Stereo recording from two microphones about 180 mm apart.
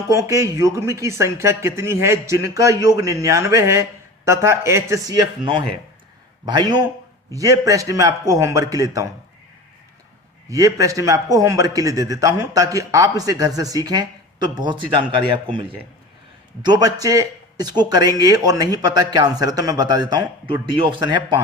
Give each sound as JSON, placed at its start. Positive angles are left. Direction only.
{"t": 0.1, "sound": "a man's voice", "side_deg": -15}
{"t": 10.5, "sound": "a man's voice", "side_deg": -20}
{"t": 16.6, "sound": "a man's voice", "side_deg": -20}